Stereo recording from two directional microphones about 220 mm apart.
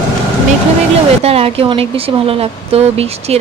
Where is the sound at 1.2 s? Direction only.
25° right (ahead or behind).